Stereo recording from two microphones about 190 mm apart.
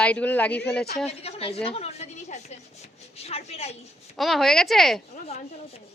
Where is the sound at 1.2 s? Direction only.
30° left (ahead or behind).